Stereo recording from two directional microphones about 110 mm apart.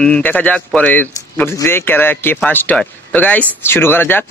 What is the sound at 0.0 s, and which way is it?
A man's voice, 15° left (ahead or behind).